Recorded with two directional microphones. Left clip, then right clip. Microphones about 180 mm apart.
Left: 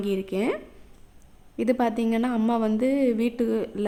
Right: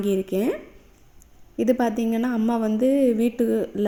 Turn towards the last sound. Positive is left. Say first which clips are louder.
# right 3 dB
turn(degrees=-20)  # may be behind; listen again after turning